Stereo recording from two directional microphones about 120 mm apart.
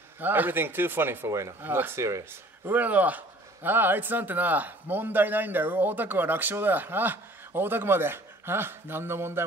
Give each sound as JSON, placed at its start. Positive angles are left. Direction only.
{"t": 0.2, "sound": "speech", "side_deg": -15}